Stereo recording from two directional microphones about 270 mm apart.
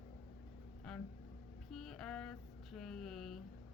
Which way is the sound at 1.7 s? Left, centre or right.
Centre.